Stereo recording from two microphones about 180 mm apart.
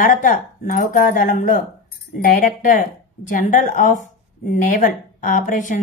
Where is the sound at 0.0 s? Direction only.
50° left (ahead or behind).